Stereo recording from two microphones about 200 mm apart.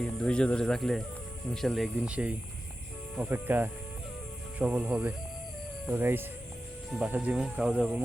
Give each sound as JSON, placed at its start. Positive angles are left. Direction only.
{"t": 0.0, "sound": "speech", "side_deg": 5}